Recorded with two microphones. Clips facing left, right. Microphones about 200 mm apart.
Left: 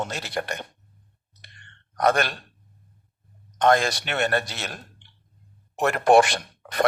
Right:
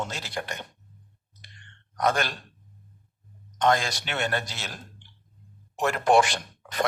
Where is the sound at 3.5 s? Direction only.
55° left (ahead or behind).